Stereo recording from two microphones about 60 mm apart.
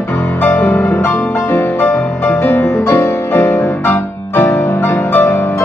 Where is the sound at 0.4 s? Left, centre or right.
Left.